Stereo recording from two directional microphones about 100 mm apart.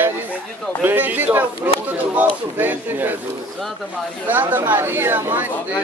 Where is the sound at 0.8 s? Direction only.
20° right (ahead or behind).